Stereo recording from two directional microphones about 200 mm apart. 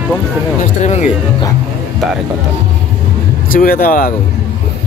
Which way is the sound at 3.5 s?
45° left (ahead or behind).